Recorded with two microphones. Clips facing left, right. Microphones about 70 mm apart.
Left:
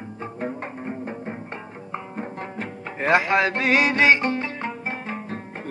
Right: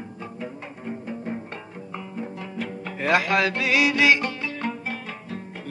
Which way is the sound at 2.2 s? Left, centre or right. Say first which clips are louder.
Right 2 dB; left.